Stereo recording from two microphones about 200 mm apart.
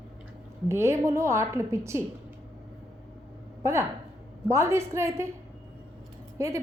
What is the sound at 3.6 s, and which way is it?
A woman's voice, 15° right (ahead or behind).